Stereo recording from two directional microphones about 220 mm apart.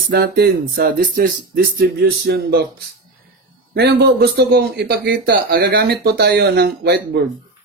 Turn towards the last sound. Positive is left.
turn(degrees=-45)  # may be behind; listen again after turning